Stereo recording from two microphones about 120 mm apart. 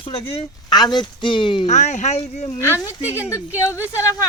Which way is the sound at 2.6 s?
20° left (ahead or behind).